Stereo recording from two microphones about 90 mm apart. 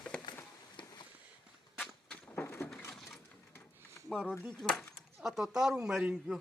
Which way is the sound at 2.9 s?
Centre (ahead or behind).